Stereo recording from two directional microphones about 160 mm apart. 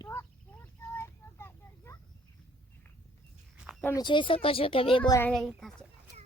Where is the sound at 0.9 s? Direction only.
15° left (ahead or behind).